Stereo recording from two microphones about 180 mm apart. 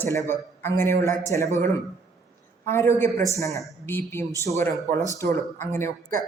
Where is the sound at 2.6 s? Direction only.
15° left (ahead or behind).